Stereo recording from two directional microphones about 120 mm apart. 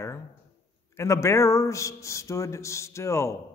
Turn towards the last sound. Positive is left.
turn(degrees=25)  # may be behind; listen again after turning